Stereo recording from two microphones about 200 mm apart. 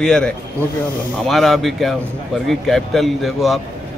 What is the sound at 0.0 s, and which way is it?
Speech, 5° left (ahead or behind).